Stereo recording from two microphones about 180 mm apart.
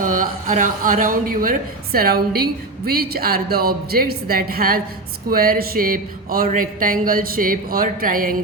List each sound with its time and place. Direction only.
0.0 s a woman's voice: 50° right (ahead or behind)